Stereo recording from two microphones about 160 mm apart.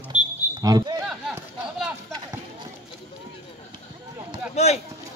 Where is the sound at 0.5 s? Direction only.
25° right (ahead or behind).